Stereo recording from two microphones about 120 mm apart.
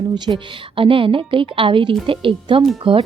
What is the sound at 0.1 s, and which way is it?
A woman's voice, 40° right (ahead or behind).